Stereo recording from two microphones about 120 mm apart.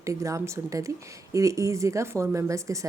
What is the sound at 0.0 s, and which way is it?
Speech, 25° right (ahead or behind).